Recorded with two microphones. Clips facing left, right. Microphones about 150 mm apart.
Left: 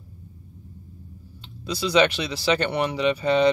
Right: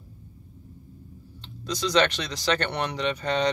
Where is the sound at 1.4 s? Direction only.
10° left (ahead or behind).